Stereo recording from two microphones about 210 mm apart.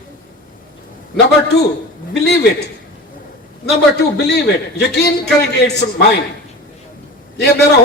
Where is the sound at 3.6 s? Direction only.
50° left (ahead or behind).